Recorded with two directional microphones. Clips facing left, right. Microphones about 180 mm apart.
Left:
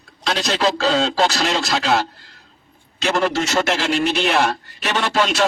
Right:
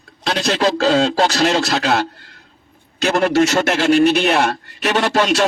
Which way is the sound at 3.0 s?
55° right (ahead or behind).